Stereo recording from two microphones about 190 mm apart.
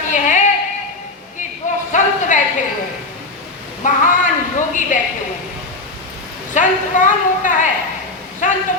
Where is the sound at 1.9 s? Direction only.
40° left (ahead or behind).